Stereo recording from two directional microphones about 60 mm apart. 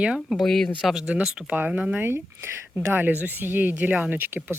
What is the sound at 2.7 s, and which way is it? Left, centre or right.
Speech, right.